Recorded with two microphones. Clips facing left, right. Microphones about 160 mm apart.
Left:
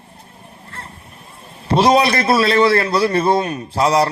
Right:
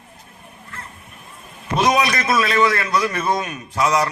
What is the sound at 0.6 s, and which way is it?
A man's voice, 35° left (ahead or behind).